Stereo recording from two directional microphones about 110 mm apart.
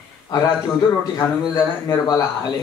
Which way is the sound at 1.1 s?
35° left (ahead or behind).